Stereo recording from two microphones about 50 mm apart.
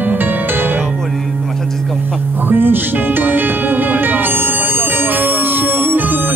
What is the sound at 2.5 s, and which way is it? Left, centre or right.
Music, right.